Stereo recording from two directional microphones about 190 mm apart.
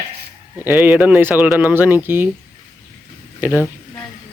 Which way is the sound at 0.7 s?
10° right (ahead or behind).